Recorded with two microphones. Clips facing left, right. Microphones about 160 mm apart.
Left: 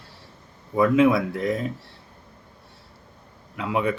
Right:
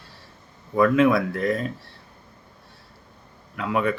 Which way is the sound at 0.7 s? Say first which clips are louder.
Even; 15° left (ahead or behind).